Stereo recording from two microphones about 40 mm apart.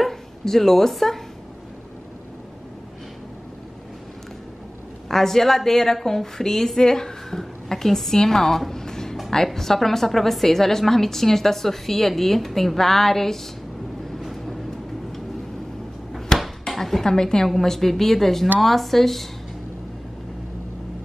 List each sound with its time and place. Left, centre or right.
0.0 s speech: centre
5.0 s a woman's voice: centre
14.1 s vehicle: centre
16.3 s a sound: centre
17.0 s a woman's voice: centre
17.5 s a woman's voice: centre